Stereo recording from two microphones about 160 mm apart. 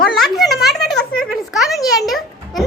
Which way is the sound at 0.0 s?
Centre (ahead or behind).